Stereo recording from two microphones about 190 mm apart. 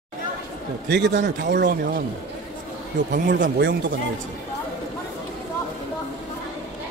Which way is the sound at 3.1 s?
45° right (ahead or behind).